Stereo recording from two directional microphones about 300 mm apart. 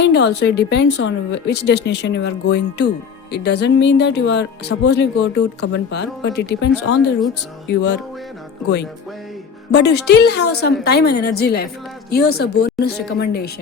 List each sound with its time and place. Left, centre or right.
0.0 s a woman's voice: left
9.7 s a woman's voice: left